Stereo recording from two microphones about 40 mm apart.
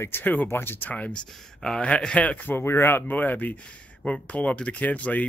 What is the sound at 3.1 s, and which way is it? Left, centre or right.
Speech, left.